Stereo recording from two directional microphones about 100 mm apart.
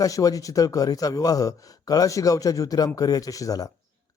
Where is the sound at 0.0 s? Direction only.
35° left (ahead or behind).